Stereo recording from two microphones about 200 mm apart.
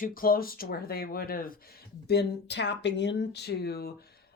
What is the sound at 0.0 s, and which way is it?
Speech, 45° left (ahead or behind).